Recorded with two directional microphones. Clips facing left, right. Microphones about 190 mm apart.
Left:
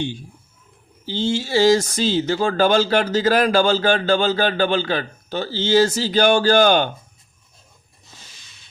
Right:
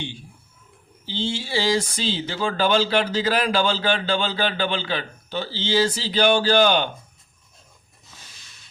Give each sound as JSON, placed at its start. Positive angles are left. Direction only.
{"t": 1.0, "sound": "speech", "side_deg": 45}